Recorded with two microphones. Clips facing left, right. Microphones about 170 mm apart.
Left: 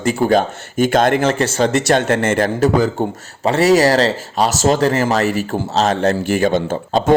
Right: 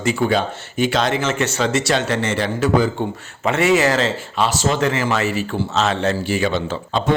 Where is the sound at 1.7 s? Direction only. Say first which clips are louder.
Left 4 dB; 50° left (ahead or behind).